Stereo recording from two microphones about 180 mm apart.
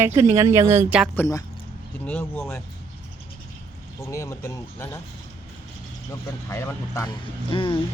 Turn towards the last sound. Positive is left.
turn(degrees=30)  # may be behind; listen again after turning